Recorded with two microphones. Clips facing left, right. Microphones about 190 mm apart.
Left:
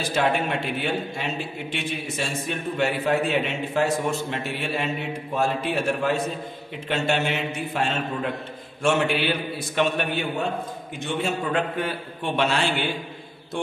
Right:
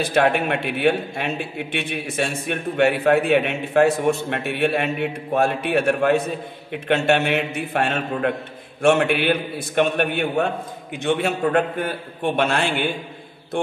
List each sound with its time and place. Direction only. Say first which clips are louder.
0.1 s a man's voice: right 3 dB; 60° right (ahead or behind)